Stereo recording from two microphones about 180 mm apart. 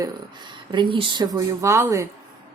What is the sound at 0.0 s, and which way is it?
Speech, 25° right (ahead or behind).